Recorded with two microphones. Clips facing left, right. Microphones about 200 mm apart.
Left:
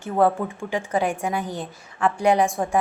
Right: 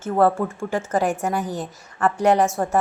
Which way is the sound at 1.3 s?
10° right (ahead or behind).